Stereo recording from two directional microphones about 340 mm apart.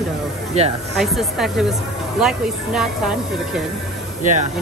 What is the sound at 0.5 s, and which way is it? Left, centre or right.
Speech, centre.